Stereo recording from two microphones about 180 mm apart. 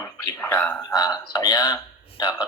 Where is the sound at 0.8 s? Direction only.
20° left (ahead or behind).